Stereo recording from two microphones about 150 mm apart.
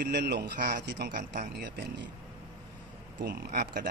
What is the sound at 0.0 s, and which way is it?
Speech, 90° right.